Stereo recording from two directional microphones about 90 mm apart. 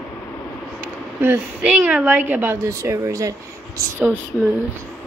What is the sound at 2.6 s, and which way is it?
Speech, 35° right (ahead or behind).